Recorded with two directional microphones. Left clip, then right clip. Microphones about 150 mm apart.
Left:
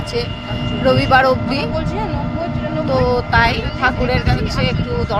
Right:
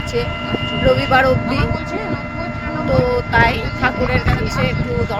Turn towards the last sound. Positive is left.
turn(degrees=15)  # may be behind; listen again after turning